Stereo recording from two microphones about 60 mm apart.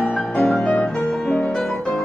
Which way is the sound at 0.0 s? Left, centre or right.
Centre.